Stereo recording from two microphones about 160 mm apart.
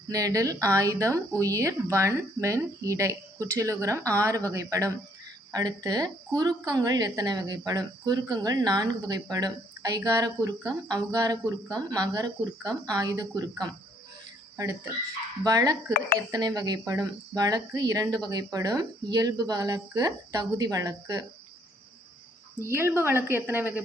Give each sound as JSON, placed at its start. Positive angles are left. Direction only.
{"t": 0.1, "sound": "speech", "side_deg": -20}
{"t": 22.6, "sound": "speech", "side_deg": -15}